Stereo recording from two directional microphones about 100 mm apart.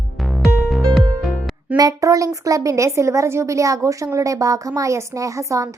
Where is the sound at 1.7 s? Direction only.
35° right (ahead or behind).